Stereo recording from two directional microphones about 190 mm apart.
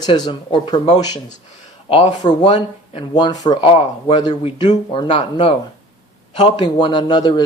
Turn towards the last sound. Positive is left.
turn(degrees=20)  # may be behind; listen again after turning